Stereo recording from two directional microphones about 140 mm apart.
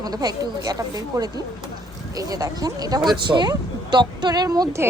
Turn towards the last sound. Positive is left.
turn(degrees=-25)  # may be behind; listen again after turning